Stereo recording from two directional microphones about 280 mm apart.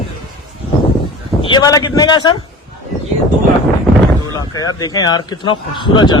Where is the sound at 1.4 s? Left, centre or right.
Centre.